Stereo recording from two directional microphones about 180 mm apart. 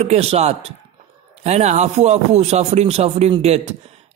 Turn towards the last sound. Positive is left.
turn(degrees=-35)  # may be behind; listen again after turning